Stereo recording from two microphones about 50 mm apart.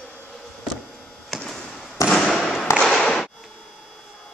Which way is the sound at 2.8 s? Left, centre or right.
Centre.